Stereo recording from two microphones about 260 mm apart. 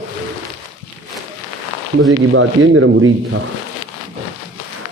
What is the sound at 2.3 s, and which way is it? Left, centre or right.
Speech, right.